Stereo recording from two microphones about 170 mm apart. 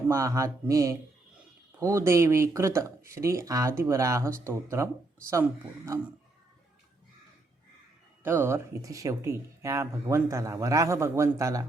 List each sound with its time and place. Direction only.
0.1 s speech: 20° right (ahead or behind)
8.2 s speech: 15° right (ahead or behind)